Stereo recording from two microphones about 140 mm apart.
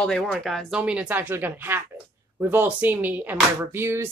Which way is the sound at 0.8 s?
10° right (ahead or behind).